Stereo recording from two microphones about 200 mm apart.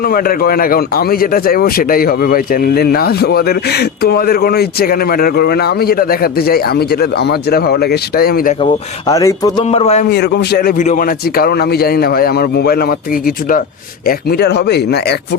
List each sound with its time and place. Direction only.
0.1 s a man's voice: 50° left (ahead or behind)
9.0 s a sound: 15° left (ahead or behind)
9.6 s a man's voice: 30° left (ahead or behind)
10.1 s a man's voice: 55° left (ahead or behind)
14.1 s speech: 50° left (ahead or behind)